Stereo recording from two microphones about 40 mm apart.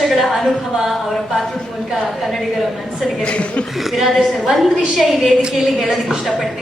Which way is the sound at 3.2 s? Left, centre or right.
Left.